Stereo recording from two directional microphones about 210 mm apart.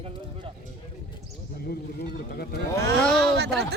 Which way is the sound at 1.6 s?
45° left (ahead or behind).